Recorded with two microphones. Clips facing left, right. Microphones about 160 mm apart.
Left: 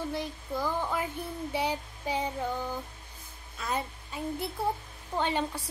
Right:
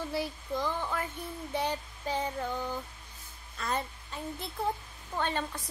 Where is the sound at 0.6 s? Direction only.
15° left (ahead or behind).